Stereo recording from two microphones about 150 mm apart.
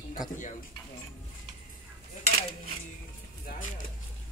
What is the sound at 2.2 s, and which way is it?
Dishes, 45° left (ahead or behind).